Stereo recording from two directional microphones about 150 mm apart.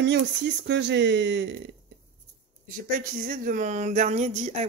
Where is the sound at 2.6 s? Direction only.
65° right (ahead or behind).